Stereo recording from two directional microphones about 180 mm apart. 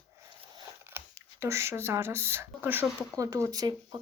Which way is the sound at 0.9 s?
15° right (ahead or behind).